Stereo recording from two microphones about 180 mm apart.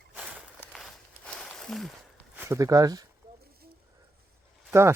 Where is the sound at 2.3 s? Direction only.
10° right (ahead or behind).